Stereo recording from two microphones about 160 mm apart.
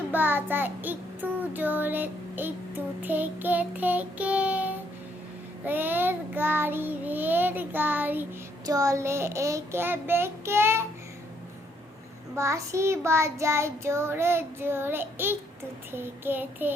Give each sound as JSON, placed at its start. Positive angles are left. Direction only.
{"t": 0.1, "sound": "child singing", "side_deg": -10}
{"t": 8.6, "sound": "child singing", "side_deg": -20}
{"t": 12.4, "sound": "child singing", "side_deg": -20}